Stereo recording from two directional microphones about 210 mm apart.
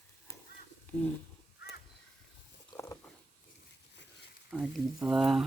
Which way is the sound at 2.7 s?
10° left (ahead or behind).